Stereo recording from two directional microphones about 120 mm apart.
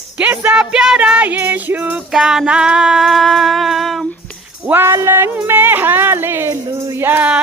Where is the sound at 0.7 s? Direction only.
5° right (ahead or behind).